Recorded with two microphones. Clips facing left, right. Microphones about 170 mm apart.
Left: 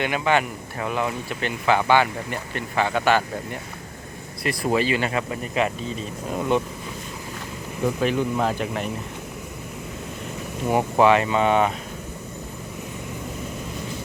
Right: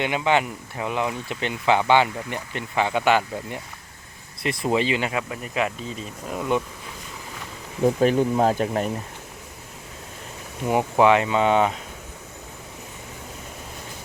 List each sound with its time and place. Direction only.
0.0 s speech: 20° right (ahead or behind)
5.3 s speech: 5° right (ahead or behind)
6.3 s speech: 10° left (ahead or behind)
7.9 s speech: 35° right (ahead or behind)
10.7 s speech: 15° right (ahead or behind)